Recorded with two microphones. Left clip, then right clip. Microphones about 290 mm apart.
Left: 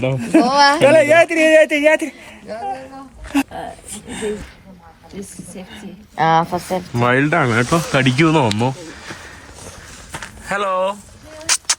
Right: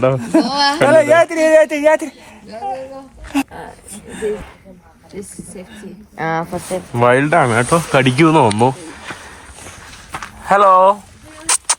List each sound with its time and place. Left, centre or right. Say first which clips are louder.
0.2 s speech: left 2 dB; centre
6.1 s a woman's voice: left 6 dB; left
6.9 s speech: right 4 dB; centre
10.4 s speech: right 10 dB; centre
11.4 s a sound: even; centre